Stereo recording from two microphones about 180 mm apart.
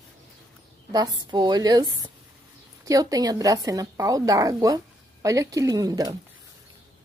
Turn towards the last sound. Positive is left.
turn(degrees=-20)  # may be behind; listen again after turning